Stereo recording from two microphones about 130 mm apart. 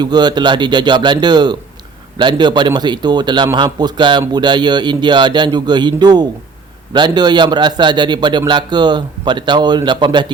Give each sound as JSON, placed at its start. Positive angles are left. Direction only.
{"t": 0.0, "sound": "a man's voice", "side_deg": -35}